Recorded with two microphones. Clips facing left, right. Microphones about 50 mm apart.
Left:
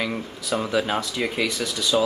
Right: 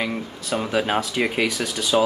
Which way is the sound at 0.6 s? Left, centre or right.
Centre.